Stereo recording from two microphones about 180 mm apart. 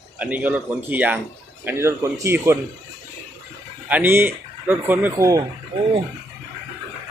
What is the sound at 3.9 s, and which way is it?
Speech, 10° right (ahead or behind).